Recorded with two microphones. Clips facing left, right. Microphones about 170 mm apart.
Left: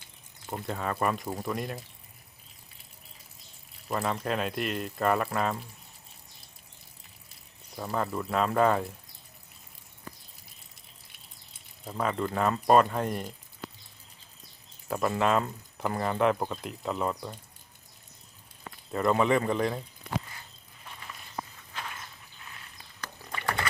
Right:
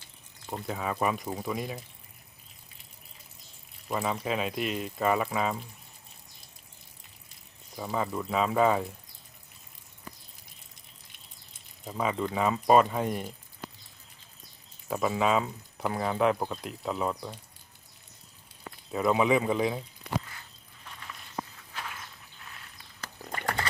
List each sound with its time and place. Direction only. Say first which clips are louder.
0.5 s speech: even; centre (ahead or behind)
3.8 s speech: even; centre (ahead or behind)
7.8 s speech: even; 5° right (ahead or behind)
11.9 s speech: even; 5° right (ahead or behind)
14.8 s speech: even; centre (ahead or behind)
18.9 s speech: even; 5° right (ahead or behind)
21.7 s a sound: even; centre (ahead or behind)
23.3 s pig: even; 45° right (ahead or behind)